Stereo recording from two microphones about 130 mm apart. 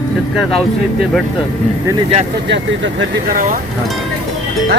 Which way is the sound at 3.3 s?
90° right.